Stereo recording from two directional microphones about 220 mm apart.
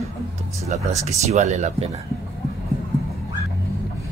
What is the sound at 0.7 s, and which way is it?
Speech, 30° right (ahead or behind).